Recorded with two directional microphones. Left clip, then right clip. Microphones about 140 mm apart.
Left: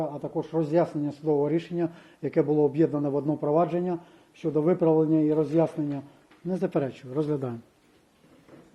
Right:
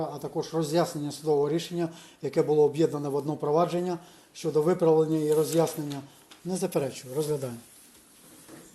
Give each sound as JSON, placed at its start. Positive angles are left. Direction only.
{"t": 0.0, "sound": "a man's voice", "side_deg": 40}
{"t": 6.5, "sound": "speech", "side_deg": 45}